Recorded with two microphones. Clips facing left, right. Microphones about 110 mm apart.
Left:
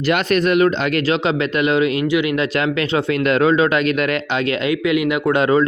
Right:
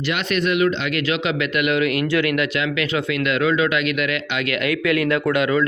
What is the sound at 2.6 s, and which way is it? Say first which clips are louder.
A man's voice: left 4 dB; 35° left (ahead or behind).